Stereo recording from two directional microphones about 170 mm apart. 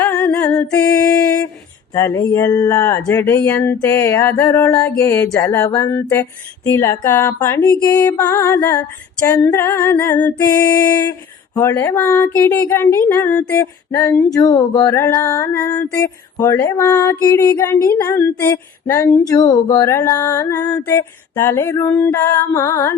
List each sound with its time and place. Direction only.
0.0 s humming: 10° left (ahead or behind)
0.5 s mantra: 20° left (ahead or behind)
1.9 s female singing: 20° left (ahead or behind)
2.6 s speech: 10° left (ahead or behind)
13.5 s female singing: 15° left (ahead or behind)
16.4 s speech: 15° left (ahead or behind)